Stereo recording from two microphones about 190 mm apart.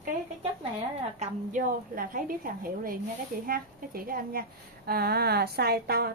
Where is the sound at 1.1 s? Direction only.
40° right (ahead or behind).